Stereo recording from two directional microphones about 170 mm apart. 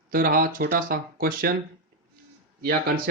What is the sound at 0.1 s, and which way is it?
Speech, 55° right (ahead or behind).